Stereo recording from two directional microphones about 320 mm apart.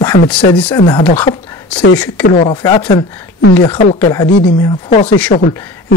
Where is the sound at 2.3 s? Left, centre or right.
Centre.